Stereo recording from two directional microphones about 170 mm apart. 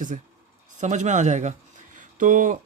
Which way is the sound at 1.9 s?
50° right (ahead or behind).